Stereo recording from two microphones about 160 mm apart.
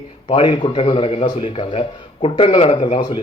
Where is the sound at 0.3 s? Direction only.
35° left (ahead or behind).